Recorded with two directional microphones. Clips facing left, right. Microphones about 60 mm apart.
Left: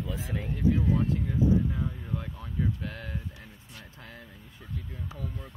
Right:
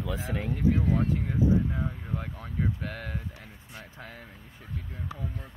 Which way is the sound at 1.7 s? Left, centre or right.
Right.